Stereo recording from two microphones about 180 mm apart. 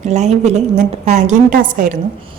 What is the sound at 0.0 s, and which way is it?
A woman's voice, 40° right (ahead or behind).